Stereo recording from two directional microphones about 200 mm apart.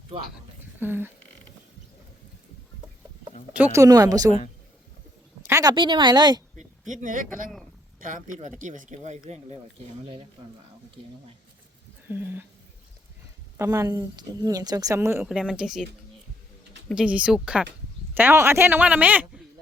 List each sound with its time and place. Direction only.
0.8 s a woman's voice: 10° right (ahead or behind)
3.5 s a woman's voice: 10° right (ahead or behind)
5.4 s a woman's voice: 15° right (ahead or behind)
6.6 s speech: 40° right (ahead or behind)
12.0 s a woman's voice: 10° right (ahead or behind)
13.6 s a woman's voice: 15° right (ahead or behind)
16.9 s a woman's voice: 5° right (ahead or behind)